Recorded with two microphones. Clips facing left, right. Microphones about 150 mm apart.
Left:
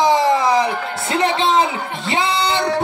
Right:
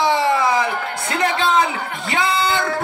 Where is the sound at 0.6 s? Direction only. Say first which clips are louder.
Left 2 dB; 25° left (ahead or behind).